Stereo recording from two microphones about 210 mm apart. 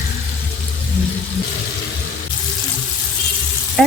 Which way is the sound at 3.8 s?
Centre (ahead or behind).